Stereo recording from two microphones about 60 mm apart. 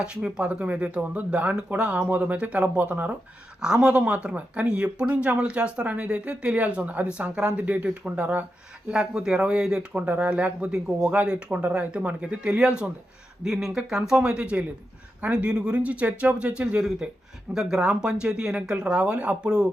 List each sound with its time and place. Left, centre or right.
0.0 s speech: centre
3.6 s speech: centre
8.9 s speech: centre